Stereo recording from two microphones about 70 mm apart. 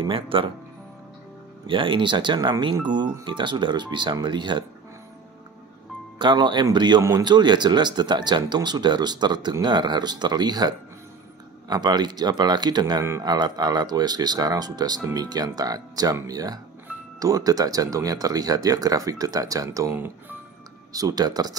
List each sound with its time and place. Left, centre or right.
2.0 s speech: right
6.1 s speech: right
7.0 s speech: right
7.2 s speech: right